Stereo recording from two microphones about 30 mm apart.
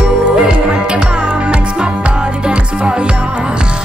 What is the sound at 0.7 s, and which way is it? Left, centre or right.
Music, right.